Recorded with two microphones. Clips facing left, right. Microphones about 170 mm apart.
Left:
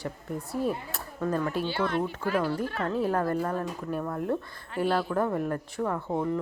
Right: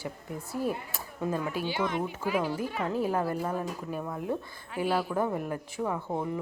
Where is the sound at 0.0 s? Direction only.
Centre (ahead or behind).